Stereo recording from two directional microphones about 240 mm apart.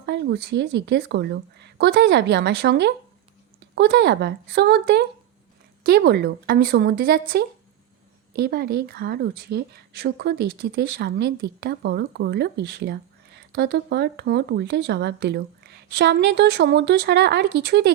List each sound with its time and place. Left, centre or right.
0.0 s speech: right